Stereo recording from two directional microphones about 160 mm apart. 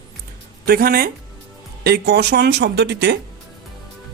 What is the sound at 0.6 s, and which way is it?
Speech, 70° right (ahead or behind).